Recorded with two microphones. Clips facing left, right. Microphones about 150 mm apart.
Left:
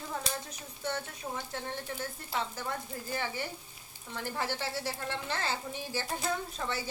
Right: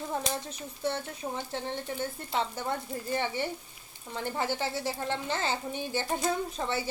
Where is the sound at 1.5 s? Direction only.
25° right (ahead or behind).